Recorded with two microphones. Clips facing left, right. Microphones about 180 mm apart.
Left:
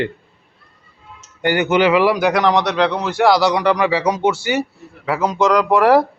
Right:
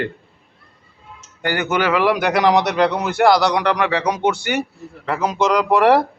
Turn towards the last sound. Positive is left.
turn(degrees=0)  # may be behind; listen again after turning